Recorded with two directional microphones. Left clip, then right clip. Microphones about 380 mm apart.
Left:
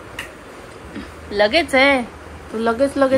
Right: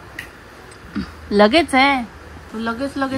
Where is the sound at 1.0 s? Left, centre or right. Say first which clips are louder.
Right 3 dB; right.